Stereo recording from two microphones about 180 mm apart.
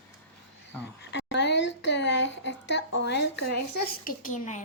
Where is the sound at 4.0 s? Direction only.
45° left (ahead or behind).